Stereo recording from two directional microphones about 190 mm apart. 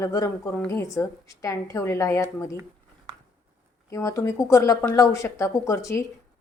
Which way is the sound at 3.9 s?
15° left (ahead or behind).